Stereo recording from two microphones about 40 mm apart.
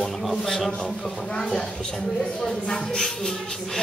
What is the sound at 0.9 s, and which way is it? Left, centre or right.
Speech, left.